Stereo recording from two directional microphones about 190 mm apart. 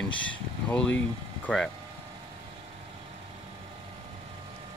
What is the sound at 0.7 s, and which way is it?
Speech, 5° left (ahead or behind).